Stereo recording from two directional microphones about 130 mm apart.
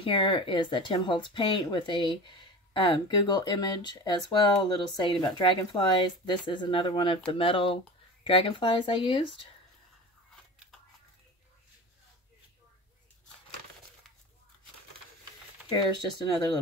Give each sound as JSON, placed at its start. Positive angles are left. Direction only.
{"t": 0.0, "sound": "speech", "side_deg": 40}
{"t": 15.7, "sound": "speech", "side_deg": 35}